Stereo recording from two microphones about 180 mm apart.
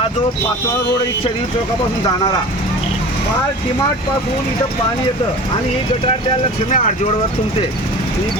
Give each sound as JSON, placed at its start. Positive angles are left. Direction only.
{"t": 6.7, "sound": "speech", "side_deg": 45}